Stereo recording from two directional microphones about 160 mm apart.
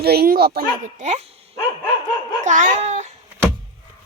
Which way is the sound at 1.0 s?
45° right (ahead or behind).